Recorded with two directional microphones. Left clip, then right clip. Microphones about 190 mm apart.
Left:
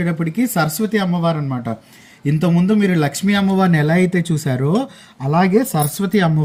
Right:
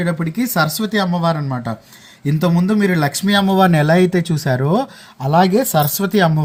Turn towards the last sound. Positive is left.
turn(degrees=-25)  # may be behind; listen again after turning